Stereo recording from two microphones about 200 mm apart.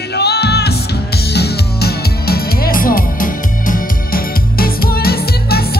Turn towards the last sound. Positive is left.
turn(degrees=50)  # may be behind; listen again after turning